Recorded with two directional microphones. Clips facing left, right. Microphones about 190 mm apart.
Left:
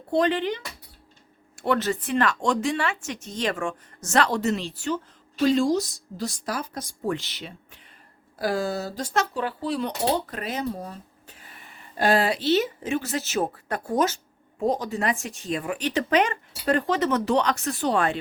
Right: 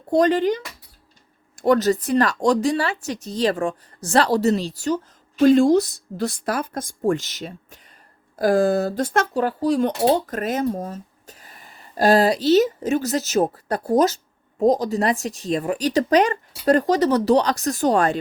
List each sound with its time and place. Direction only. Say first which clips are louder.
0.1 s speech: right 5 dB; 40° right (ahead or behind)
5.4 s speech: right 7 dB; 50° right (ahead or behind)